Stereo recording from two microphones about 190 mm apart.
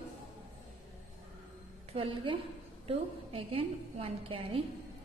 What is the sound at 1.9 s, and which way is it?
A woman's voice, 30° right (ahead or behind).